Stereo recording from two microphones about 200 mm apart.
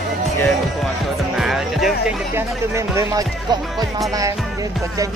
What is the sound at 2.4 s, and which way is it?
Speech, 15° right (ahead or behind).